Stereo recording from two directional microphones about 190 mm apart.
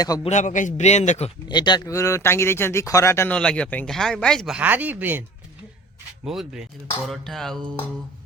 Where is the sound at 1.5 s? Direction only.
25° left (ahead or behind); by 5.2 s 10° right (ahead or behind).